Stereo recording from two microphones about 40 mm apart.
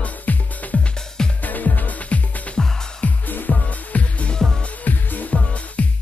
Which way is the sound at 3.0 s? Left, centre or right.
Left.